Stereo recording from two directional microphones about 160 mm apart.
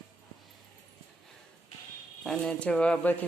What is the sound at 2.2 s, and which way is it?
Speech, 5° left (ahead or behind).